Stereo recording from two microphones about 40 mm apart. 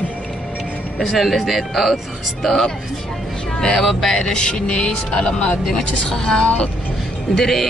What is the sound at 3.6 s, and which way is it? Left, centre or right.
Speech, centre.